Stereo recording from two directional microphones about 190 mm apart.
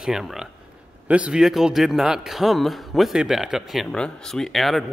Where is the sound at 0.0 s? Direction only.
Centre (ahead or behind).